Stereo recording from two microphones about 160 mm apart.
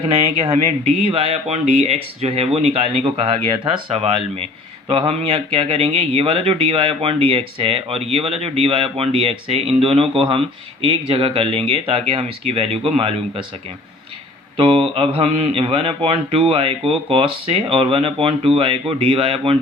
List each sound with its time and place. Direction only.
0.1 s a man's voice: 35° right (ahead or behind)
14.6 s a man's voice: 35° right (ahead or behind)